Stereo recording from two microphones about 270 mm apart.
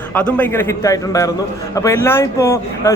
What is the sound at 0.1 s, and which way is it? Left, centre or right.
A man's voice, centre.